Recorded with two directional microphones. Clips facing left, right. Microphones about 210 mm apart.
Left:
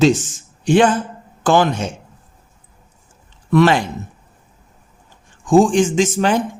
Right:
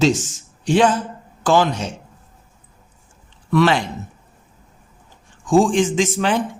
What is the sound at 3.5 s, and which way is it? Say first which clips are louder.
Speech: left 3 dB; 45° left (ahead or behind).